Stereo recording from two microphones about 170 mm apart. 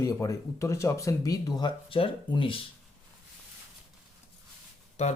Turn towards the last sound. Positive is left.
turn(degrees=40)  # may be behind; listen again after turning